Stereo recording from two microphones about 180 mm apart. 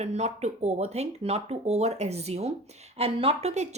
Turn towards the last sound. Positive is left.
turn(degrees=-40)  # may be behind; listen again after turning